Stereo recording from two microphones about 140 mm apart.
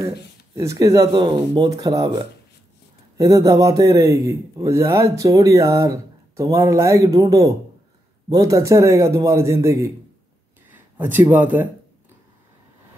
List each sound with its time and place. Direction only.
0.6 s speech: 25° right (ahead or behind)